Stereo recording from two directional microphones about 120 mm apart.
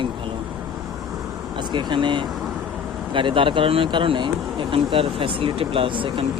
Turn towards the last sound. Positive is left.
turn(degrees=-45)  # may be behind; listen again after turning